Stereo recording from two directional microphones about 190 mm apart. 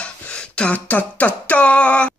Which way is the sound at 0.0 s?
5° left (ahead or behind).